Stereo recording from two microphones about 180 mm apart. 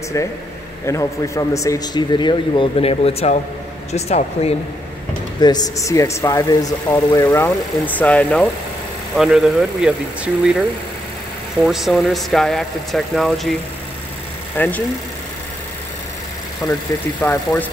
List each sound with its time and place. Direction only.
0.8 s a man's voice: 15° left (ahead or behind); by 4.6 s 35° left (ahead or behind)
5.4 s speech: 20° left (ahead or behind); by 13.6 s centre (ahead or behind)
14.6 s speech: 10° left (ahead or behind)
16.6 s speech: 15° left (ahead or behind)